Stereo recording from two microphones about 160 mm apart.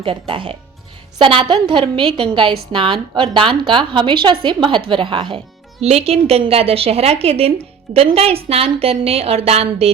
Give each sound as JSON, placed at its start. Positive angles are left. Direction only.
{"t": 0.0, "sound": "a woman's voice", "side_deg": -35}